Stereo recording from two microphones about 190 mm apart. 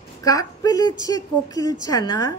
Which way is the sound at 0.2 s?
20° left (ahead or behind).